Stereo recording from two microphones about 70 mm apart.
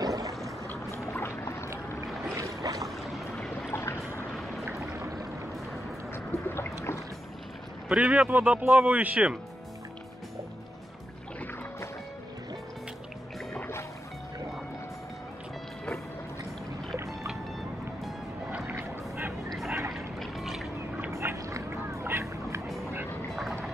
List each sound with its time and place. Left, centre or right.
0.0 s music: right
0.7 s music: left
2.3 s boat: right
3.0 s boat: centre
3.7 s a sound: left
6.1 s music: left
7.9 s speech: centre
16.9 s boat: right
18.7 s vehicle: right
19.9 s pour: centre
21.1 s a sound: right
21.6 s music: right